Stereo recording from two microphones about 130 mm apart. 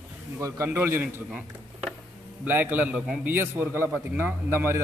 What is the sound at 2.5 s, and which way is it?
A man's voice, 15° right (ahead or behind).